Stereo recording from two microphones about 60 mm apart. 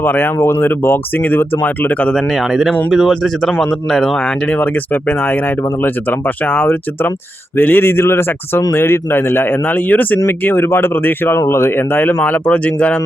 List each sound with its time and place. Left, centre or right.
0.0 s speech: left
2.1 s speech: centre
4.5 s speech: left
12.2 s speech: left